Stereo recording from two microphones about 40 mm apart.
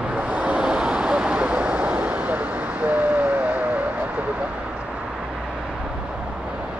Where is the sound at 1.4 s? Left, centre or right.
Right.